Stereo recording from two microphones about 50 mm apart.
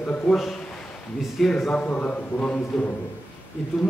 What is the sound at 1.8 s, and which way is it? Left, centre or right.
A man's voice, left.